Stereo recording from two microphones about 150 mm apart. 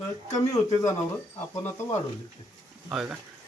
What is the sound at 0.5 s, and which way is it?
Speech, 20° left (ahead or behind).